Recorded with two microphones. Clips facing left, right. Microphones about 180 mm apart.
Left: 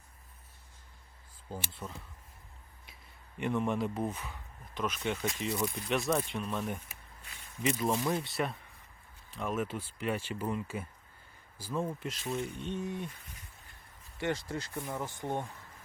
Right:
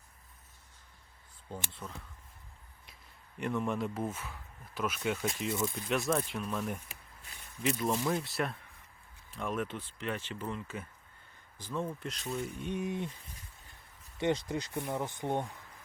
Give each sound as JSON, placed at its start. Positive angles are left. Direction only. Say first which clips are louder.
{"t": 1.5, "sound": "speech", "louder": "left 1 dB", "side_deg": 5}
{"t": 3.3, "sound": "speech", "louder": "left 2 dB", "side_deg": 0}
{"t": 12.5, "sound": "speech", "louder": "right 1 dB", "side_deg": -10}
{"t": 14.2, "sound": "speech", "louder": "right 3 dB", "side_deg": -20}